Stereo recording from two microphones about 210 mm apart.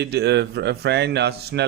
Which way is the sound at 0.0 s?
55° right (ahead or behind).